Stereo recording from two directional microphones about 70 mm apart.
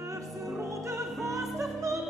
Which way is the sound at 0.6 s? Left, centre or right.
Right.